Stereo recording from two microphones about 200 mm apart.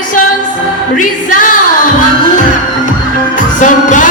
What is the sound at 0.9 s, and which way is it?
Music, 40° left (ahead or behind).